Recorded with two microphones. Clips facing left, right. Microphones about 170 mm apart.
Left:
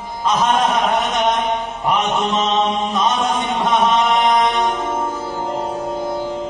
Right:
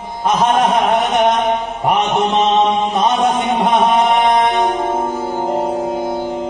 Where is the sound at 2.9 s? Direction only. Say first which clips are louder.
Right 4 dB; 60° right (ahead or behind).